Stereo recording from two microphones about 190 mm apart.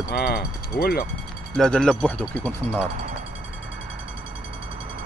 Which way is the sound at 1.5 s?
5° left (ahead or behind).